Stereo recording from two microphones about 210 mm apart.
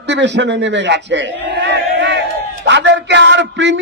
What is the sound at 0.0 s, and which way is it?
A man's voice, 55° right (ahead or behind).